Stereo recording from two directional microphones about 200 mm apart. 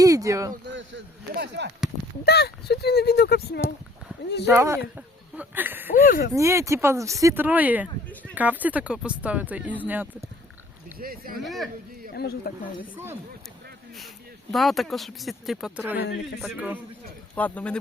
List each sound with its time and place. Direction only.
0.0 s speech: 15° right (ahead or behind)
0.7 s speech: 65° right (ahead or behind)
2.2 s speech: 55° left (ahead or behind)
4.4 s speech: 15° right (ahead or behind)
6.1 s speech: 50° left (ahead or behind)
6.3 s speech: 15° right (ahead or behind)
11.0 s speech: 45° right (ahead or behind)
11.4 s speech: centre (ahead or behind)
12.1 s speech: 50° left (ahead or behind)
14.5 s speech: centre (ahead or behind)
17.3 s speech: 5° left (ahead or behind)